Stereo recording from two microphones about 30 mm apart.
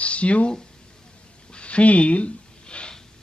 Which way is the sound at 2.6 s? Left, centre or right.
Left.